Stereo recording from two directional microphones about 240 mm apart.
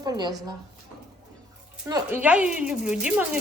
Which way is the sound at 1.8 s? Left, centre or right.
Centre.